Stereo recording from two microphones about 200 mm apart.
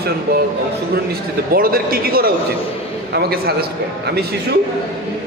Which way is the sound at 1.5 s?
45° right (ahead or behind).